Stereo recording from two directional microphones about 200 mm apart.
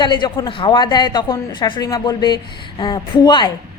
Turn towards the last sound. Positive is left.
turn(degrees=20)  # may be behind; listen again after turning